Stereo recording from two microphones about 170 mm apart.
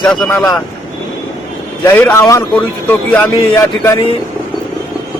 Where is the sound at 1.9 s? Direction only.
15° left (ahead or behind).